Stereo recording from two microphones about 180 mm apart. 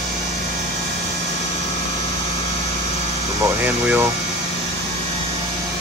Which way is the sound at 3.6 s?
10° right (ahead or behind).